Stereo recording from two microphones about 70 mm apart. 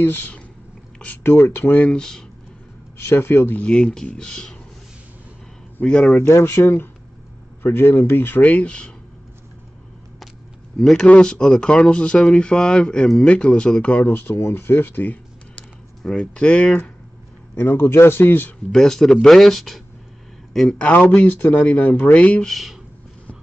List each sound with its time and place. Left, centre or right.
0.0 s speech: left
1.8 s speech: centre
3.0 s speech: left; by 4.6 s centre
5.8 s speech: left
6.4 s speech: left; by 8.9 s centre
10.8 s speech: centre
14.0 s speech: left
16.0 s speech: centre
17.6 s speech: left
18.7 s speech: centre
21.1 s speech: left
22.4 s speech: centre